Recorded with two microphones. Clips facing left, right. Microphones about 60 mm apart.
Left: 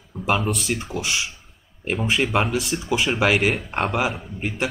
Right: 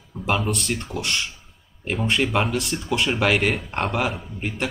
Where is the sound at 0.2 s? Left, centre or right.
Centre.